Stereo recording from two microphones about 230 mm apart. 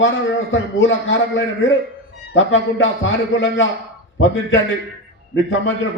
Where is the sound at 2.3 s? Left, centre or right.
Left.